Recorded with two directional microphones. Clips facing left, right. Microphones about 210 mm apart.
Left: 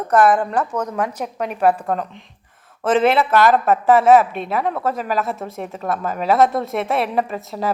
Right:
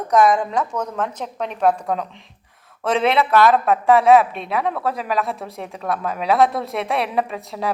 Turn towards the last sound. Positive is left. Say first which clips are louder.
# left 2 dB
turn(degrees=0)  # may be behind; listen again after turning